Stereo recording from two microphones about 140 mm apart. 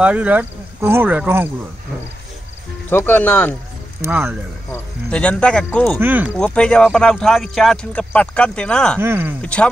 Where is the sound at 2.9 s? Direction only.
15° left (ahead or behind).